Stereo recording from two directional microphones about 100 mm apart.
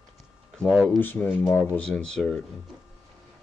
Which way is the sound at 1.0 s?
20° left (ahead or behind).